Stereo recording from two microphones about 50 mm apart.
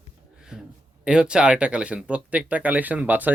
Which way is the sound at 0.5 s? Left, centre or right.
Centre.